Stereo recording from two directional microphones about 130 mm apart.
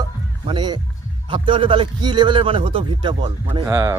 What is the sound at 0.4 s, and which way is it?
Speech, 35° right (ahead or behind).